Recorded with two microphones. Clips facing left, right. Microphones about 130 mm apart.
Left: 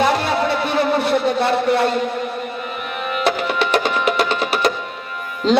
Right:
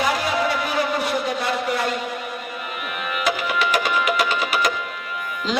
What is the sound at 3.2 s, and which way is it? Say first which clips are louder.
Music: left 3 dB; 30° left (ahead or behind).